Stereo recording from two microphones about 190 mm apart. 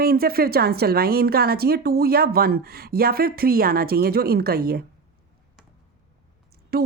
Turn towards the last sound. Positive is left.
turn(degrees=-55)  # may be behind; listen again after turning